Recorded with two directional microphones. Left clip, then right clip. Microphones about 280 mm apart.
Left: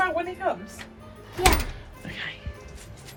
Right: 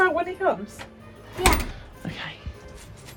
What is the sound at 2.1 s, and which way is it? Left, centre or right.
Music, centre.